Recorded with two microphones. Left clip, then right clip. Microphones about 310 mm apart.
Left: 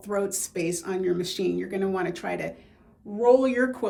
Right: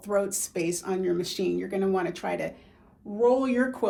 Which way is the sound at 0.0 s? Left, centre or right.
Centre.